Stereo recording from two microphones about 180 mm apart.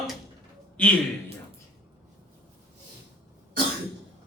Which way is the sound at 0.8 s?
5° left (ahead or behind).